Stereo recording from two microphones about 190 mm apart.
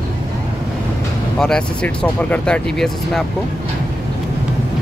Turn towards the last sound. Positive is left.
turn(degrees=0)  # may be behind; listen again after turning